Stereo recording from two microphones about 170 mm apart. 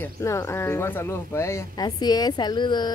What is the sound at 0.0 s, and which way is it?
Speech, 15° left (ahead or behind).